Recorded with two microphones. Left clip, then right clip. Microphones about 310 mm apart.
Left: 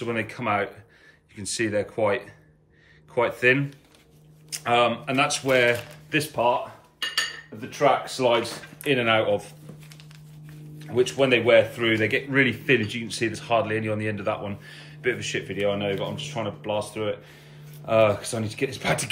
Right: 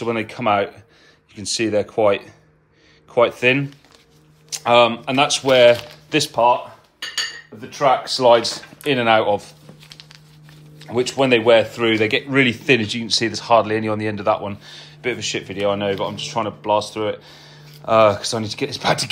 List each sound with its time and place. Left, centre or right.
0.0 s speech: centre
7.8 s speech: centre
11.1 s speech: centre